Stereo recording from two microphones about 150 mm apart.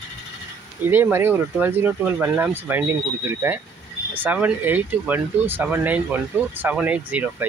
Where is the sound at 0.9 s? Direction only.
15° right (ahead or behind).